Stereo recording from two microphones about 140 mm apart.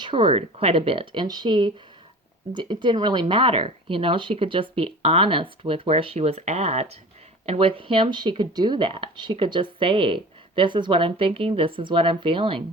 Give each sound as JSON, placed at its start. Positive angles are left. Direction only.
{"t": 0.0, "sound": "speech", "side_deg": -35}